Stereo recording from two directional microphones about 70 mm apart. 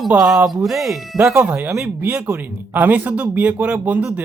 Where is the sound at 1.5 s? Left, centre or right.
Right.